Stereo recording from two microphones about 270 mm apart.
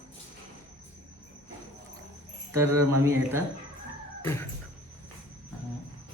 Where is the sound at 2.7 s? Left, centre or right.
Right.